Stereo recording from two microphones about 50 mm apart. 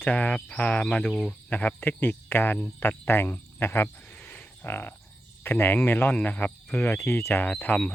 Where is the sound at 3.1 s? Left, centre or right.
Left.